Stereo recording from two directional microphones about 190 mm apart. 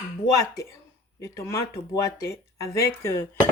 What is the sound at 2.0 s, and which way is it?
Speech, 15° left (ahead or behind).